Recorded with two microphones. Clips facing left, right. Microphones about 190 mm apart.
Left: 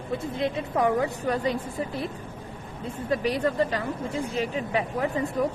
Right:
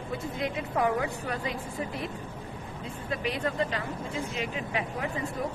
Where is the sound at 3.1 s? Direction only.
40° left (ahead or behind).